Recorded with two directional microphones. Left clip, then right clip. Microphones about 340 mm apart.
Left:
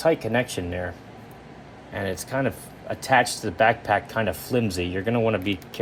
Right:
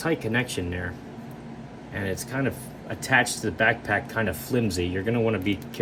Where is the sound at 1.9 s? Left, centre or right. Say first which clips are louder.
Left 3 dB; centre.